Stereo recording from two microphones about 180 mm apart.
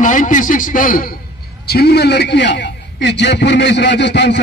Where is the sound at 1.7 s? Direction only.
60° left (ahead or behind).